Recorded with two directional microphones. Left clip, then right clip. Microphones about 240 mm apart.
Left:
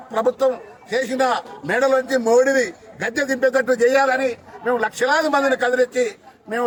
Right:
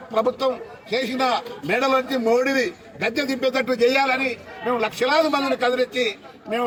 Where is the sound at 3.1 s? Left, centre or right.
Centre.